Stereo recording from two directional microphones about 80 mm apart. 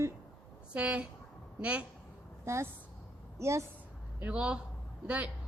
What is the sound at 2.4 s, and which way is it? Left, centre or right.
Speech, right.